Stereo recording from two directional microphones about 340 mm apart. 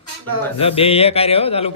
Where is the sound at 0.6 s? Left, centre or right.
Centre.